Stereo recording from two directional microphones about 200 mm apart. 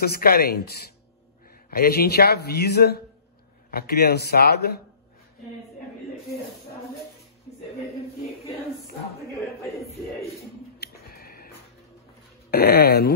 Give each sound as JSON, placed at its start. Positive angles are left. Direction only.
{"t": 0.0, "sound": "a man's voice", "side_deg": 50}
{"t": 10.8, "sound": "music", "side_deg": 50}
{"t": 12.4, "sound": "a man's voice", "side_deg": 50}